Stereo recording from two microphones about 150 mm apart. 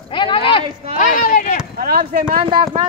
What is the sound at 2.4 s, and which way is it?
Speech, 35° right (ahead or behind).